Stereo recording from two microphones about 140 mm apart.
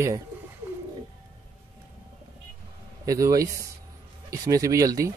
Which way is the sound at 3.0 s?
25° right (ahead or behind).